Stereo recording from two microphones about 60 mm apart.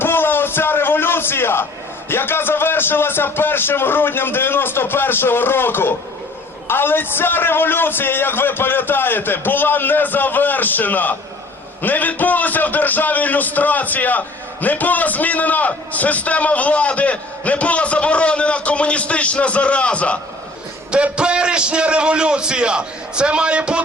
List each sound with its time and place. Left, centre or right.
0.0 s a sound: left
2.0 s a man's voice: left
20.9 s a man's voice: centre